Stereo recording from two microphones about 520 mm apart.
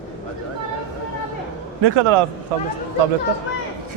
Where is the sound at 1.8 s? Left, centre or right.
Right.